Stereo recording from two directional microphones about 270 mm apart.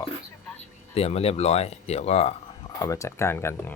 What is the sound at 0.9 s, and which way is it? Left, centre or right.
Speech, left.